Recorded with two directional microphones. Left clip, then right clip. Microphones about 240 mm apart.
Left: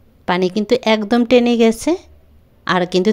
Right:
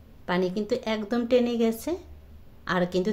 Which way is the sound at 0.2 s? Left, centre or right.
Left.